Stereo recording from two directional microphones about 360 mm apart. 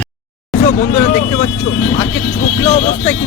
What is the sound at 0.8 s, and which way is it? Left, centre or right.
Speech, left.